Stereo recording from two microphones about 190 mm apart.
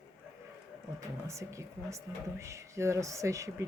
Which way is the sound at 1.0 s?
15° right (ahead or behind).